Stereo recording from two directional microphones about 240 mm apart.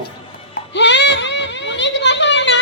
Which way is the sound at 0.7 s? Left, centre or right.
Left.